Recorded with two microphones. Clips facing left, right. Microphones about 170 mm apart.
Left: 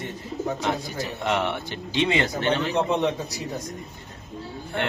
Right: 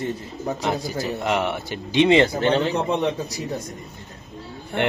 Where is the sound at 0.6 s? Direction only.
5° right (ahead or behind).